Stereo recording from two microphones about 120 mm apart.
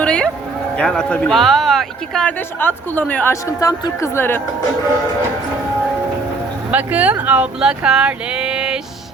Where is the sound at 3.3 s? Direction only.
25° left (ahead or behind).